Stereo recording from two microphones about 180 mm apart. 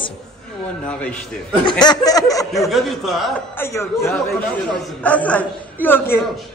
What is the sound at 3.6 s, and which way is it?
A man's voice, 15° left (ahead or behind).